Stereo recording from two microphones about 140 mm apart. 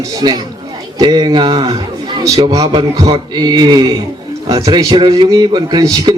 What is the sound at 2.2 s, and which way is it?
A man's voice, 25° right (ahead or behind).